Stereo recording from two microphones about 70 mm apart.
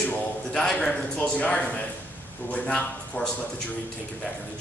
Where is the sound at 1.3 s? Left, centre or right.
Centre.